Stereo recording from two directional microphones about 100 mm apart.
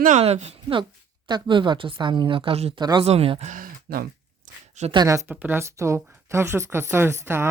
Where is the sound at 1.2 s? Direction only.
50° right (ahead or behind); by 2.7 s 75° right (ahead or behind).